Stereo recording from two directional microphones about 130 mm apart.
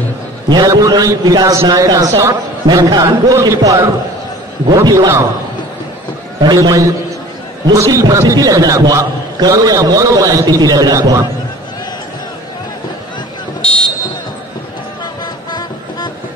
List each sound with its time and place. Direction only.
0.5 s a man's voice: 30° right (ahead or behind)
6.4 s a man's voice: 30° right (ahead or behind)
13.6 s buzzer: 10° left (ahead or behind)